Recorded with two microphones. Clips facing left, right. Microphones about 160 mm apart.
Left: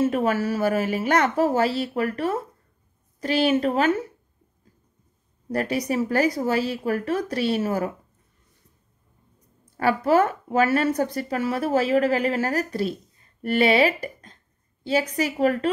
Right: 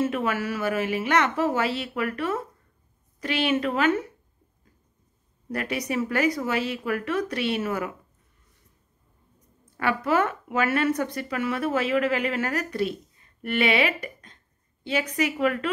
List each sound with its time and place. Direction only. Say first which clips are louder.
0.0 s a woman's voice: left 4 dB; 40° left (ahead or behind)
5.5 s a woman's voice: left 4 dB; 35° left (ahead or behind)
9.8 s speech: left 4 dB; 35° left (ahead or behind)